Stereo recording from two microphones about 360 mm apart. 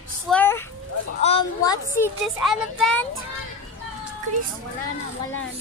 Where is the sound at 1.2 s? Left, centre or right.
Centre.